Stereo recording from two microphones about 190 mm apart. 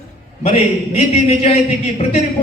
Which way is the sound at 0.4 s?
35° left (ahead or behind).